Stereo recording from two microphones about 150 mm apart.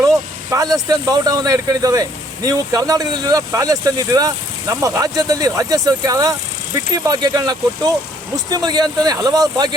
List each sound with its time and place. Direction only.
0.5 s speech: 25° right (ahead or behind)